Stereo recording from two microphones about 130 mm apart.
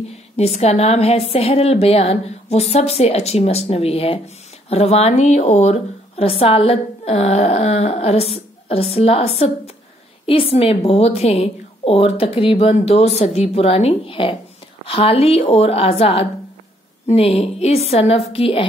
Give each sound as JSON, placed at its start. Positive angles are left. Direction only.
{"t": 0.4, "sound": "a woman's voice", "side_deg": 55}